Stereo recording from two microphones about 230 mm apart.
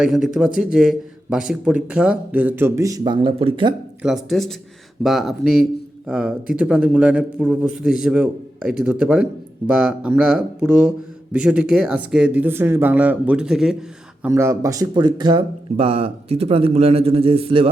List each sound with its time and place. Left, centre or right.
0.0 s speech: centre; by 3.8 s right
4.0 s speech: centre; by 17.7 s right